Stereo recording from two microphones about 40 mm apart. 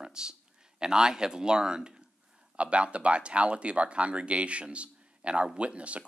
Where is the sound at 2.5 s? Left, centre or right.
Right.